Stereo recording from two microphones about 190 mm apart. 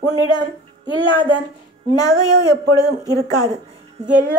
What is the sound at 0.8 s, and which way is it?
Speech, 25° left (ahead or behind).